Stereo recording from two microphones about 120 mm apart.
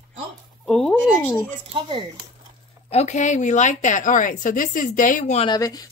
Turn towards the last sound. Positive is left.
turn(degrees=30)  # may be behind; listen again after turning